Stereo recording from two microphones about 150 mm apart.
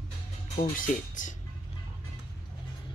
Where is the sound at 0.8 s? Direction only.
60° left (ahead or behind).